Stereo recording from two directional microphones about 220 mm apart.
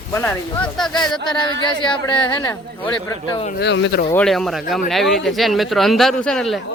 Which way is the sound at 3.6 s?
55° left (ahead or behind).